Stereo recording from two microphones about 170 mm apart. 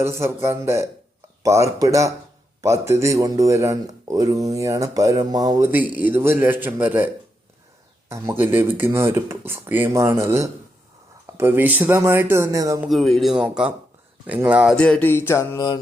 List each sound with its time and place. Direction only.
0.0 s a man's voice: 15° right (ahead or behind)
8.1 s speech: 15° right (ahead or behind)
12.9 s speech: centre (ahead or behind)
14.8 s music: 5° left (ahead or behind); by 15.8 s 25° left (ahead or behind)